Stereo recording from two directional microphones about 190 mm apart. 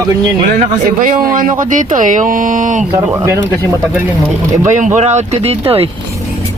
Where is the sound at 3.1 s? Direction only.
15° right (ahead or behind).